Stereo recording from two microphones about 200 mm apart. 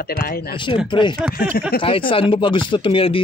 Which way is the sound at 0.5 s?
25° left (ahead or behind).